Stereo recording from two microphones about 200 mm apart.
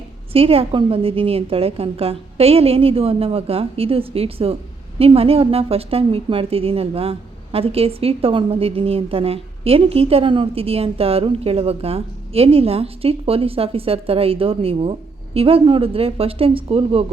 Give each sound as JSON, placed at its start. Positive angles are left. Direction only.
{"t": 0.3, "sound": "a woman's voice", "side_deg": -30}